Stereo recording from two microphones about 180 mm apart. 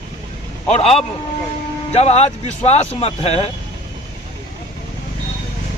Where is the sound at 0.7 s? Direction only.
35° left (ahead or behind).